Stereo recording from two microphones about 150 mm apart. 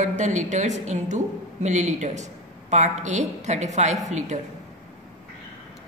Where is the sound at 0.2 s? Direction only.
50° right (ahead or behind).